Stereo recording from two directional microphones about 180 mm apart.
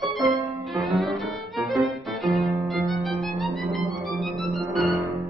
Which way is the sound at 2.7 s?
Centre (ahead or behind).